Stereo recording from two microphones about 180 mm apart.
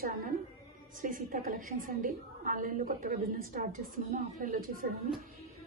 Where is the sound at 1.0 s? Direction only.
50° right (ahead or behind).